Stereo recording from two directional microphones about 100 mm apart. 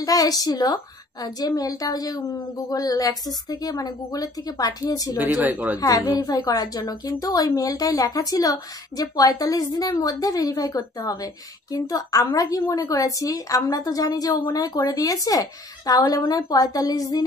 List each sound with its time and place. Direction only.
0.0 s a woman's voice: 40° left (ahead or behind)
5.2 s speech: 15° right (ahead or behind)
5.8 s a woman's voice: 35° left (ahead or behind)